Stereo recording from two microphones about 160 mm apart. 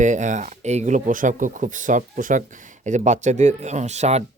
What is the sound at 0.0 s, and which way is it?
Speech, 50° right (ahead or behind).